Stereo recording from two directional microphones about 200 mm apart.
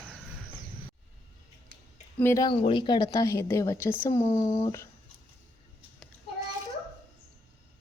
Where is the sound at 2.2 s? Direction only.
15° left (ahead or behind).